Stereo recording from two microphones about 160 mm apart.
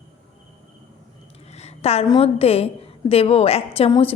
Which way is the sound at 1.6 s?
40° left (ahead or behind).